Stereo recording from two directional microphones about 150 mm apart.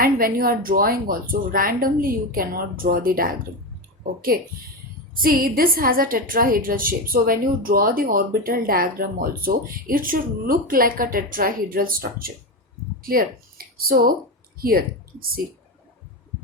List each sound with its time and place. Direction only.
0.0 s a woman's voice: 75° right (ahead or behind)